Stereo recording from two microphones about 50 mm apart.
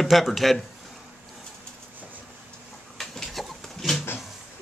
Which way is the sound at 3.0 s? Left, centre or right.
Centre.